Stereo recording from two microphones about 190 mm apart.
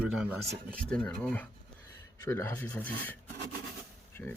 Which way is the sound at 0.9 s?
5° left (ahead or behind).